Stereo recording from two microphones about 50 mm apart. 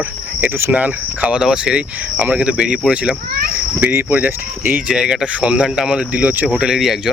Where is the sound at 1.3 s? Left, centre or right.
Centre.